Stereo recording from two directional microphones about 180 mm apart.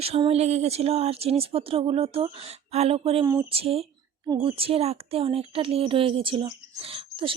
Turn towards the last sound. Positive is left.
turn(degrees=-30)  # may be behind; listen again after turning